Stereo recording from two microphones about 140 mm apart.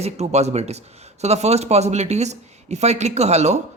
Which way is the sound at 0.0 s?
50° right (ahead or behind).